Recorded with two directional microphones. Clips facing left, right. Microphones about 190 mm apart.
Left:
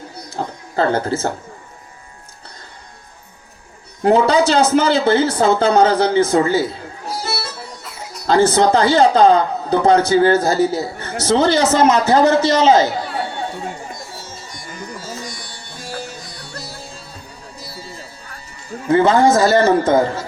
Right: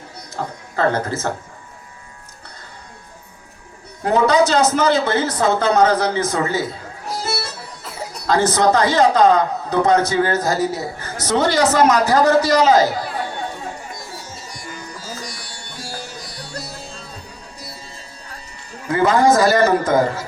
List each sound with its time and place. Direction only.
0.3 s speech: 30° left (ahead or behind)
4.0 s a man's voice: 30° left (ahead or behind)
8.3 s a man's voice: 30° left (ahead or behind)
18.9 s a man's voice: 25° left (ahead or behind)